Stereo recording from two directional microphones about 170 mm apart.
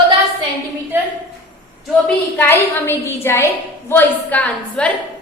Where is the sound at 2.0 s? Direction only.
10° left (ahead or behind).